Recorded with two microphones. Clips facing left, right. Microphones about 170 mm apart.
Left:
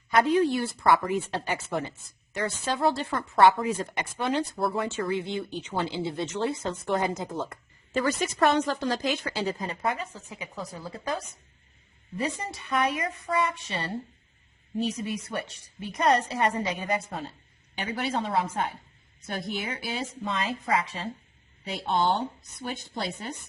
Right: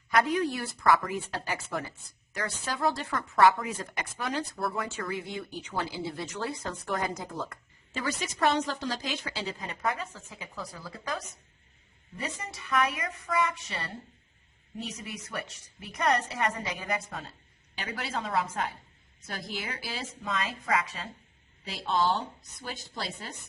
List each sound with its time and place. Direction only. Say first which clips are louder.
0.1 s a woman's voice: left 4 dB; 30° left (ahead or behind)
7.9 s a woman's voice: left 7 dB; 50° left (ahead or behind)
9.6 s a woman's voice: left 2 dB; 25° left (ahead or behind)
10.0 s a woman's voice: left 3 dB; 15° left (ahead or behind)